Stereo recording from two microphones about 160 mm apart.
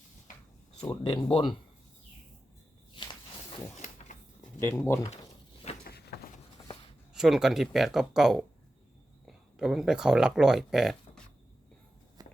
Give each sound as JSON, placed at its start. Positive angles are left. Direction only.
{"t": 0.8, "sound": "speech", "side_deg": 25}
{"t": 3.8, "sound": "a sound", "side_deg": 45}
{"t": 4.6, "sound": "speech", "side_deg": 15}
{"t": 5.8, "sound": "a sound", "side_deg": 90}
{"t": 7.1, "sound": "speech", "side_deg": 0}
{"t": 12.2, "sound": "walk", "side_deg": -25}